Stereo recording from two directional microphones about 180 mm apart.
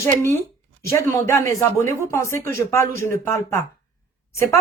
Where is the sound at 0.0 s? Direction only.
15° left (ahead or behind).